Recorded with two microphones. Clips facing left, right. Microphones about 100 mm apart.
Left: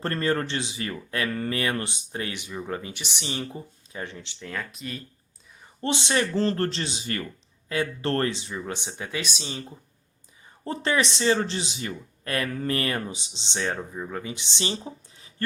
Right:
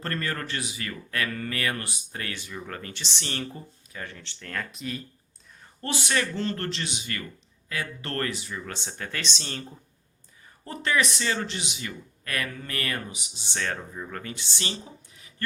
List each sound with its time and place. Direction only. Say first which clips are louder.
0.0 s speech: left 6 dB; 30° left (ahead or behind); by 5.0 s centre (ahead or behind)
5.8 s speech: left 3 dB; 25° left (ahead or behind)
10.6 s speech: left 1 dB; 30° left (ahead or behind)